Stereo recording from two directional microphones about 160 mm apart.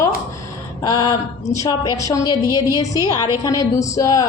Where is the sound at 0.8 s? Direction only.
20° left (ahead or behind).